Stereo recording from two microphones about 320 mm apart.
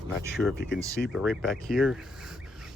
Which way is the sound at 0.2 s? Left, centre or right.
Centre.